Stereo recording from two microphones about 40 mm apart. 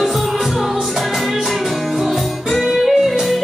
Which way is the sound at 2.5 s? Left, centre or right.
Centre.